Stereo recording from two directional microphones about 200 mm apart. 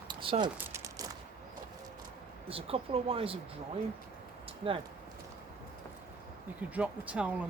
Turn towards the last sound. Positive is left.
turn(degrees=-5)  # may be behind; listen again after turning